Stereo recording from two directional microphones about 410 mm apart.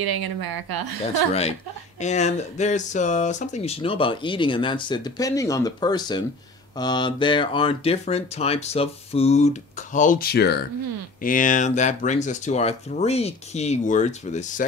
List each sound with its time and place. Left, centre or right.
0.0 s a woman's voice: right
2.0 s speech: centre